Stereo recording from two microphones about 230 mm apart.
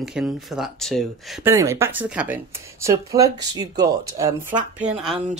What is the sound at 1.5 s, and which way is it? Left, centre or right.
Speech, centre.